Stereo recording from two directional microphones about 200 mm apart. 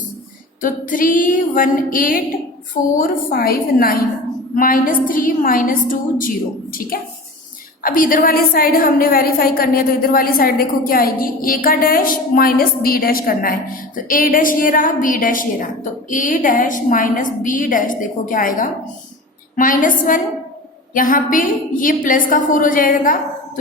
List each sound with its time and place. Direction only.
0.6 s a woman's voice: 40° left (ahead or behind)